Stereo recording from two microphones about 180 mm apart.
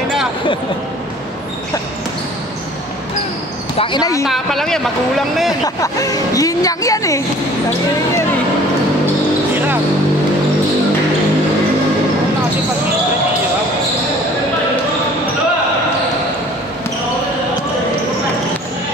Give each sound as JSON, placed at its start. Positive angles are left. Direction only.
{"t": 3.7, "sound": "a woman's voice", "side_deg": 25}
{"t": 4.2, "sound": "speech", "side_deg": 0}
{"t": 5.5, "sound": "a woman's voice", "side_deg": 20}